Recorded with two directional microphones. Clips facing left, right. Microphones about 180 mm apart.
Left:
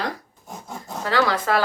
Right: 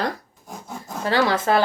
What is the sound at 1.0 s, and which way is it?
Speech, 25° right (ahead or behind).